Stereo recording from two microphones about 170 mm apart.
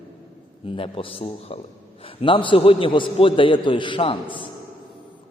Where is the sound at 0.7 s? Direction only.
30° left (ahead or behind).